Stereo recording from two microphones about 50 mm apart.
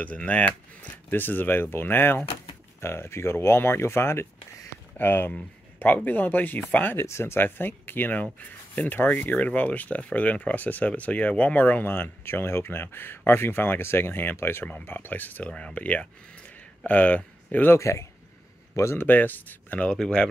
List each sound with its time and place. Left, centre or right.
0.0 s speech: left
1.1 s speech: left
2.8 s speech: left
4.9 s speech: left
7.0 s speech: left
7.3 s speech: left
11.9 s speech: left
15.4 s speech: left
17.7 s speech: left
18.9 s speech: left
20.0 s speech: centre